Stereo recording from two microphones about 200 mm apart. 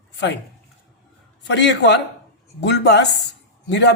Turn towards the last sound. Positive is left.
turn(degrees=60)  # may be behind; listen again after turning